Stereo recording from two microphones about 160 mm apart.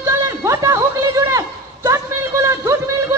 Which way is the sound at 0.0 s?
20° right (ahead or behind).